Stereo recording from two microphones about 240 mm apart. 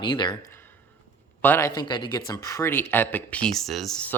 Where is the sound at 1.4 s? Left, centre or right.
Centre.